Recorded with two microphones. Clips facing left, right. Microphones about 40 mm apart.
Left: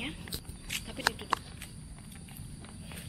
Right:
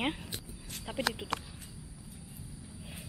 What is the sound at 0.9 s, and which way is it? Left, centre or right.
Speech, centre.